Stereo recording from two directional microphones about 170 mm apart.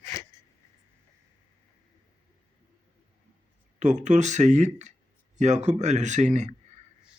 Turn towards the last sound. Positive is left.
turn(degrees=-45)  # may be behind; listen again after turning